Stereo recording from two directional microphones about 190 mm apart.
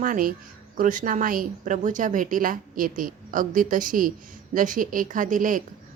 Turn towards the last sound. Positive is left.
turn(degrees=-45)  # may be behind; listen again after turning